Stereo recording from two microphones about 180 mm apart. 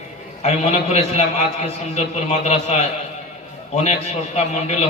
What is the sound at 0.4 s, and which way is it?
A man's voice, 35° left (ahead or behind).